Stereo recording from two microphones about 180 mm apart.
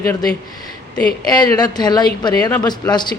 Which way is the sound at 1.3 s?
20° left (ahead or behind).